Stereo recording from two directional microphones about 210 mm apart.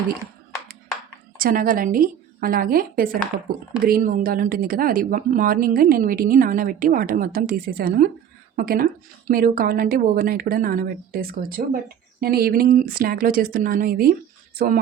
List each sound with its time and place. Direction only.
1.4 s a woman's voice: 45° right (ahead or behind)